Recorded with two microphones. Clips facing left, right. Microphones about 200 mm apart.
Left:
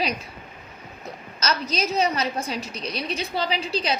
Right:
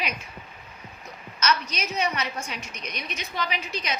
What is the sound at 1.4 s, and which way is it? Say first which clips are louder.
A woman's voice: left 2 dB; 35° left (ahead or behind).